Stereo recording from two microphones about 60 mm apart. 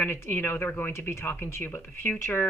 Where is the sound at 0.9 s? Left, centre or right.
Left.